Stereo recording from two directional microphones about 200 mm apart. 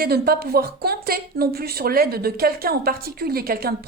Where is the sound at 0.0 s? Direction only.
50° right (ahead or behind).